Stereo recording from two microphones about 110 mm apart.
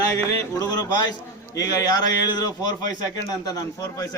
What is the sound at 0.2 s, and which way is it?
Speech, 40° left (ahead or behind).